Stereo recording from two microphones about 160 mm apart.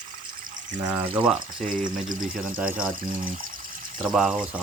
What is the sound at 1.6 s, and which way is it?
Speech, 55° right (ahead or behind).